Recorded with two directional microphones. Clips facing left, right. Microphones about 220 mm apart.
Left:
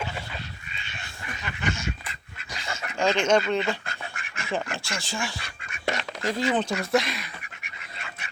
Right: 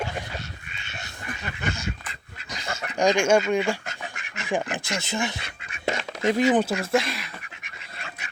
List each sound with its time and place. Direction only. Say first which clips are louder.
1.5 s a sound: left 1 dB; 40° right (ahead or behind)
3.0 s speech: right 2 dB; 15° right (ahead or behind)
6.9 s speech: even; centre (ahead or behind)